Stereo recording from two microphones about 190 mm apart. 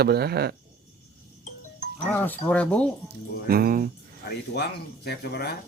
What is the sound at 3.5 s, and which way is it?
Speech, 50° right (ahead or behind).